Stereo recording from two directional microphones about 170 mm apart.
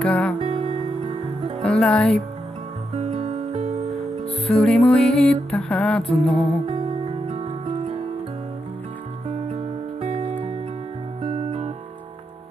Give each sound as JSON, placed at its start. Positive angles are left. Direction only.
{"t": 0.0, "sound": "music", "side_deg": 5}
{"t": 0.4, "sound": "music", "side_deg": -30}
{"t": 1.6, "sound": "speech", "side_deg": 5}
{"t": 3.2, "sound": "music", "side_deg": -35}
{"t": 3.9, "sound": "music", "side_deg": 0}
{"t": 6.6, "sound": "music", "side_deg": -30}
{"t": 9.3, "sound": "music", "side_deg": -35}
{"t": 11.2, "sound": "guitar", "side_deg": -30}